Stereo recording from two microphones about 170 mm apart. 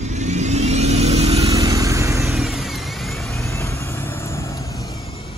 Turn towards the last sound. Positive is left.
turn(degrees=20)  # may be behind; listen again after turning